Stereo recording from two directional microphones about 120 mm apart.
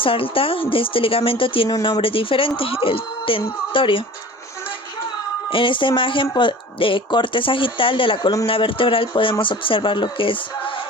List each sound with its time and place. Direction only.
0.0 s speech: 50° left (ahead or behind)
5.5 s speech: 45° left (ahead or behind)